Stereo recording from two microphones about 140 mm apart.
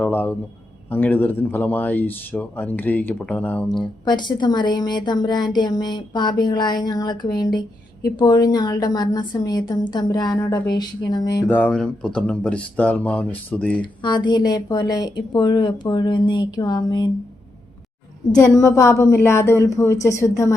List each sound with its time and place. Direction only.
0.0 s speech: 10° left (ahead or behind)
4.0 s a woman's voice: 30° left (ahead or behind)
11.4 s speech: 10° left (ahead or behind)
13.8 s speech: 35° left (ahead or behind)
18.3 s a woman's voice: 20° left (ahead or behind)